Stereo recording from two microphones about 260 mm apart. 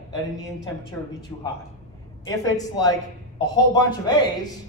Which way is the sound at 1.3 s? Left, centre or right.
Centre.